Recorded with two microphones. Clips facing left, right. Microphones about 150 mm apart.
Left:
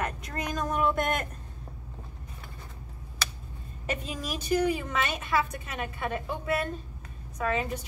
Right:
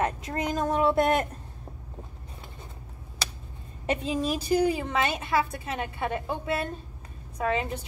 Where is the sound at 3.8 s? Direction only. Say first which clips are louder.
Right 7 dB; 30° right (ahead or behind).